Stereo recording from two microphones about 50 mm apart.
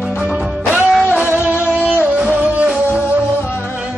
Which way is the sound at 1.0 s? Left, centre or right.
Right.